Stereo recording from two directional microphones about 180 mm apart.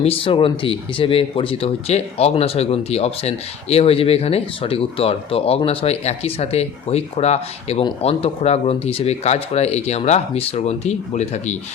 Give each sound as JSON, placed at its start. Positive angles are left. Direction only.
{"t": 0.0, "sound": "speech", "side_deg": 30}